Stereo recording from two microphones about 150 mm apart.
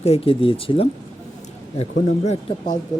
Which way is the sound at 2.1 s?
50° left (ahead or behind).